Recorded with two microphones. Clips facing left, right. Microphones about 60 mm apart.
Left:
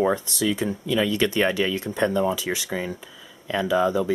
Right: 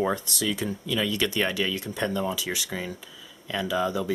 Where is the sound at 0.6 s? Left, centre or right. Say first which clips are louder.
Left 5 dB; left.